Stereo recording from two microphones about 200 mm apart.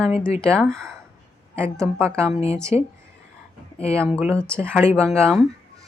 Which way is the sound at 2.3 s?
30° left (ahead or behind).